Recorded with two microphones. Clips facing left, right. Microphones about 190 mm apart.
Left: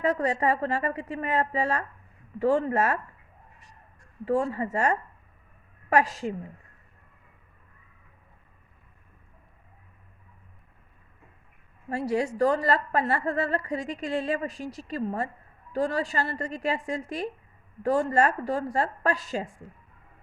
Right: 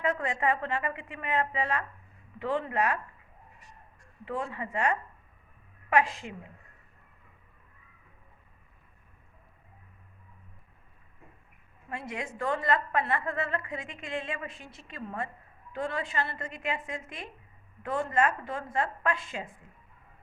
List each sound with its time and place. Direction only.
0.0 s a woman's voice: 40° left (ahead or behind)
4.3 s a woman's voice: 40° left (ahead or behind)
11.9 s a woman's voice: 40° left (ahead or behind)